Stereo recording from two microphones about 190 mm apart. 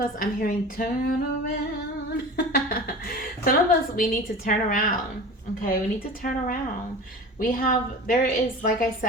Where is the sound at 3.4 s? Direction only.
50° left (ahead or behind).